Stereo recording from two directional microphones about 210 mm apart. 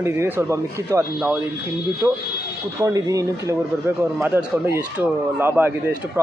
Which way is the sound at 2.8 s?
15° right (ahead or behind).